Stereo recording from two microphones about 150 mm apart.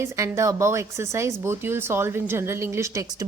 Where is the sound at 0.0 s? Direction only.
20° right (ahead or behind).